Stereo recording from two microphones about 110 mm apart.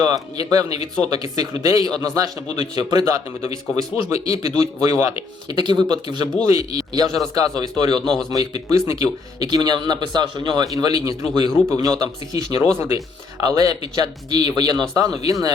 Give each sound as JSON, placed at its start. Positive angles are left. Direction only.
{"t": 0.0, "sound": "a man's voice", "side_deg": -35}